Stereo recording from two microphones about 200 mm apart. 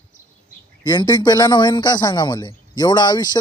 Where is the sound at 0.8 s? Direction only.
20° left (ahead or behind).